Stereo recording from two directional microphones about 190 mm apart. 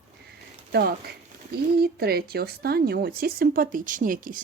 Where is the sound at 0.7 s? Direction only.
55° right (ahead or behind).